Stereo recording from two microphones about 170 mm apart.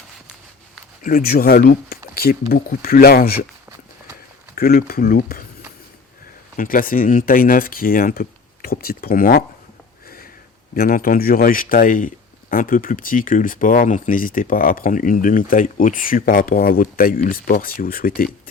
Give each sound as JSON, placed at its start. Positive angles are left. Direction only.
{"t": 1.0, "sound": "speech", "side_deg": 55}
{"t": 2.1, "sound": "a sound", "side_deg": 65}
{"t": 2.5, "sound": "speech", "side_deg": 60}
{"t": 4.5, "sound": "speech", "side_deg": 60}
{"t": 6.6, "sound": "speech", "side_deg": 55}
{"t": 10.8, "sound": "speech", "side_deg": 55}